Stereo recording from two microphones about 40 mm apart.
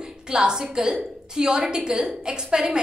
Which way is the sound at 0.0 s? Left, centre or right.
Centre.